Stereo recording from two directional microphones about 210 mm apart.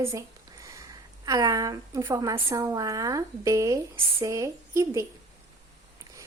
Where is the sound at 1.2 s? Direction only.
15° right (ahead or behind).